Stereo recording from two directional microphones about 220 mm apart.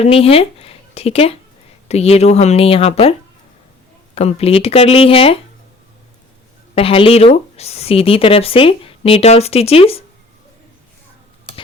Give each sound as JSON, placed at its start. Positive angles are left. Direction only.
{"t": 0.0, "sound": "speech", "side_deg": 25}
{"t": 6.7, "sound": "speech", "side_deg": 25}